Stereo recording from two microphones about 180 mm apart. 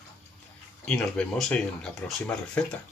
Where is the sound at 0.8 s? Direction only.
5° left (ahead or behind).